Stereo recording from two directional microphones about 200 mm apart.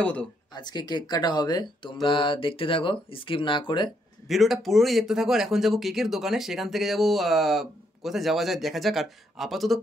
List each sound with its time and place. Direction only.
0.0 s speech: 5° left (ahead or behind)
0.5 s speech: 20° left (ahead or behind)
4.3 s speech: centre (ahead or behind)